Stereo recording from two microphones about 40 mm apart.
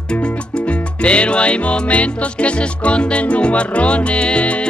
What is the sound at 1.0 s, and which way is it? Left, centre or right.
Music, left.